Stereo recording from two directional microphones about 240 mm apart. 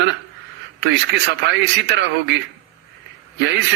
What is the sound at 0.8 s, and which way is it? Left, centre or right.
A man's voice, right.